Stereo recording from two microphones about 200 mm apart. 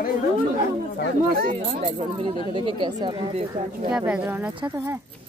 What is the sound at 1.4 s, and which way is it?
Speech, 40° right (ahead or behind).